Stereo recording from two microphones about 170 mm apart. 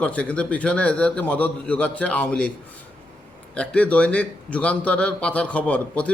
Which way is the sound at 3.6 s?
5° left (ahead or behind).